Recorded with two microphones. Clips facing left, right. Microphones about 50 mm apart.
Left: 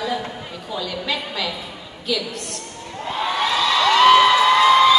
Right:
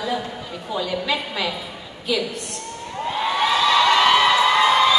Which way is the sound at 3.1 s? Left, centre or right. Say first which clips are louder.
Right 1 dB; centre.